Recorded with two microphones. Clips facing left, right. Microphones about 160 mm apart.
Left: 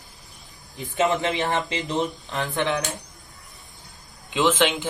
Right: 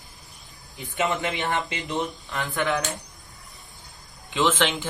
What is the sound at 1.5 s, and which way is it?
Speech, 25° left (ahead or behind).